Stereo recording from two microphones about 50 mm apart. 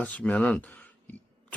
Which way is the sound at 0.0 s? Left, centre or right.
Left.